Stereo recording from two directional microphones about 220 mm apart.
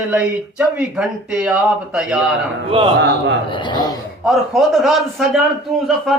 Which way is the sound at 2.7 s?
25° right (ahead or behind).